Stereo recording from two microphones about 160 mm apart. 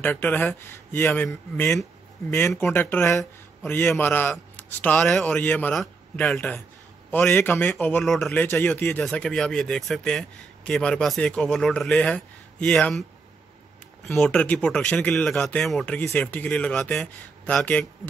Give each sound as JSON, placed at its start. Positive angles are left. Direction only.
{"t": 0.0, "sound": "a man's voice", "side_deg": 10}
{"t": 14.0, "sound": "speech", "side_deg": 5}